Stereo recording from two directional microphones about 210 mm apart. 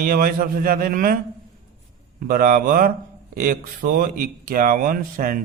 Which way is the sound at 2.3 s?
45° right (ahead or behind).